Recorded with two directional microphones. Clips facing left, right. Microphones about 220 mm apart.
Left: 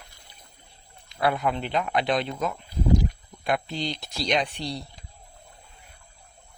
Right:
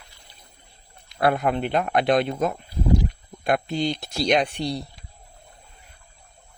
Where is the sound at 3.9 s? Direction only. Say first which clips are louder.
Right 3 dB; 50° right (ahead or behind).